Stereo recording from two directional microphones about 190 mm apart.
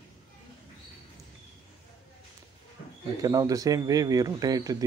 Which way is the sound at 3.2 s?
20° right (ahead or behind).